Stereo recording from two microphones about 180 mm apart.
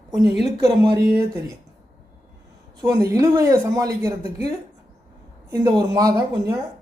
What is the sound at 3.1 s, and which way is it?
Speech, 15° right (ahead or behind).